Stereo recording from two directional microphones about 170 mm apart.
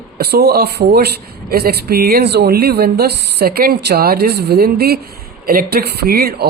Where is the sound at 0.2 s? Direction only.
70° right (ahead or behind).